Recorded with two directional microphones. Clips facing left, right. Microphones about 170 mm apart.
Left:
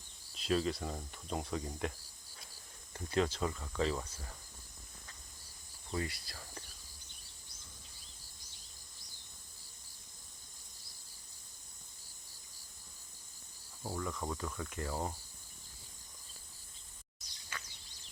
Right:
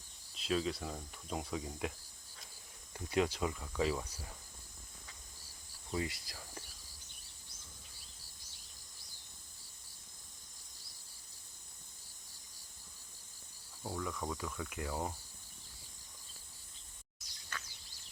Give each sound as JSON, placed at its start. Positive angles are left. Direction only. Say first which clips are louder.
{"t": 0.3, "sound": "speech", "louder": "left 2 dB", "side_deg": 0}
{"t": 2.9, "sound": "speech", "louder": "even", "side_deg": -15}
{"t": 5.9, "sound": "speech", "louder": "even", "side_deg": -15}
{"t": 13.8, "sound": "speech", "louder": "left 1 dB", "side_deg": 0}